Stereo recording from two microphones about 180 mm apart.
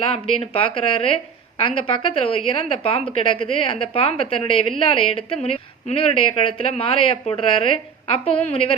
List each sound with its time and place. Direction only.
0.0 s a woman's voice: 30° left (ahead or behind)